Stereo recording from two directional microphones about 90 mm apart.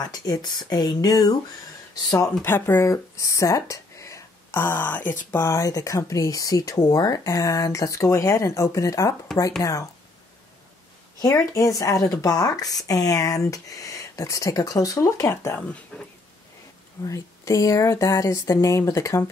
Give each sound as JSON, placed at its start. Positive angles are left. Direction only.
{"t": 0.0, "sound": "speech", "side_deg": 50}
{"t": 2.0, "sound": "speech", "side_deg": 35}
{"t": 2.4, "sound": "speech", "side_deg": 25}
{"t": 4.5, "sound": "speech", "side_deg": 25}
{"t": 5.4, "sound": "speech", "side_deg": 40}
{"t": 11.1, "sound": "speech", "side_deg": 35}
{"t": 15.9, "sound": "speech", "side_deg": 10}
{"t": 17.0, "sound": "speech", "side_deg": 35}